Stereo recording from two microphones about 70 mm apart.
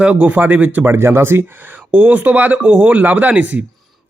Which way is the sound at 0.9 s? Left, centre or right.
Right.